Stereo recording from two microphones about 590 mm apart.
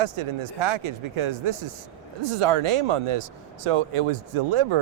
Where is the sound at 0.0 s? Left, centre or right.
Right.